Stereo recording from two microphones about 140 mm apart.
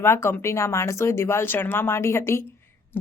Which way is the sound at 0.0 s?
20° left (ahead or behind).